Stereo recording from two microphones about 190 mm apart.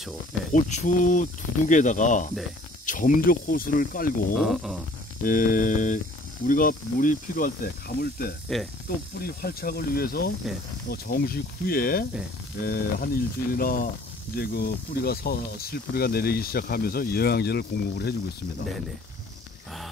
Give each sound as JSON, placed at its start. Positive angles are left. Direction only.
{"t": 0.5, "sound": "speech", "side_deg": 40}
{"t": 4.4, "sound": "speech", "side_deg": 0}
{"t": 5.2, "sound": "speech", "side_deg": 45}